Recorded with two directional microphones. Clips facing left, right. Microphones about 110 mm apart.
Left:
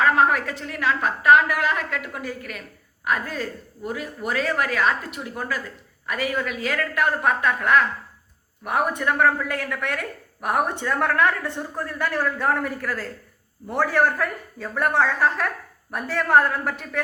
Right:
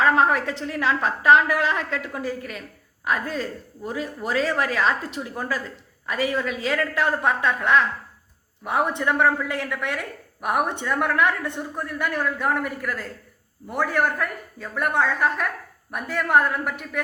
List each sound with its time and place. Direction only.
0.0 s a woman's voice: 30° right (ahead or behind); by 17.0 s 10° right (ahead or behind)